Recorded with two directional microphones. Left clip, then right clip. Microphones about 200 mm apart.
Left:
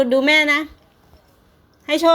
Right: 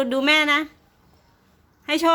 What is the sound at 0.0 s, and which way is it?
Speech, 15° right (ahead or behind).